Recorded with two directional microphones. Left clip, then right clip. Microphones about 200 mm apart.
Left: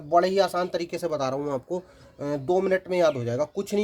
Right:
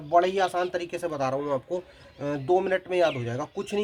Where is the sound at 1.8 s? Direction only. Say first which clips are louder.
Even; 50° left (ahead or behind).